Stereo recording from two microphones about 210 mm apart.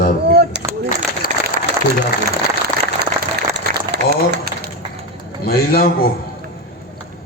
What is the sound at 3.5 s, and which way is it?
Applause, 50° right (ahead or behind).